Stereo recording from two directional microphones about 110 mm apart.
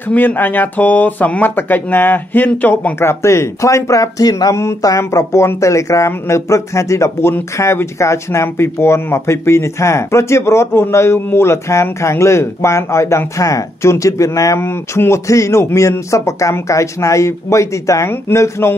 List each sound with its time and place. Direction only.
0.1 s speech: 15° left (ahead or behind)